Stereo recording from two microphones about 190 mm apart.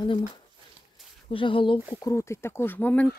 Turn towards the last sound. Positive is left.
turn(degrees=10)  # may be behind; listen again after turning